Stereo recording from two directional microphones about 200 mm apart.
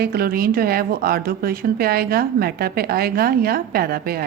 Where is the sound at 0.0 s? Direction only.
50° right (ahead or behind).